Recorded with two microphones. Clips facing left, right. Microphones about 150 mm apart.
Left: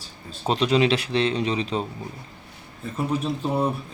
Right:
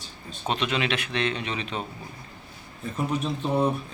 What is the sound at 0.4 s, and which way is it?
A man's voice, 35° left (ahead or behind).